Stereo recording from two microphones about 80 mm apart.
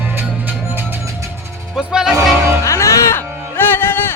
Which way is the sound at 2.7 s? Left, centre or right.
Left.